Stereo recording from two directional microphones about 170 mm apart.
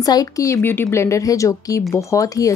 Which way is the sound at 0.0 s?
20° left (ahead or behind).